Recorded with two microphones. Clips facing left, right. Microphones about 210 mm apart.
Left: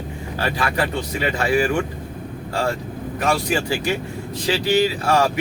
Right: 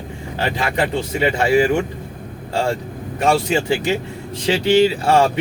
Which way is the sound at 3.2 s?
25° right (ahead or behind).